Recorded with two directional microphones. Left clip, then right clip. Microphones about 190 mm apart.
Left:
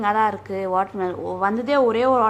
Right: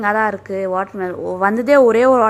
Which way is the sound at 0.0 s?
20° right (ahead or behind).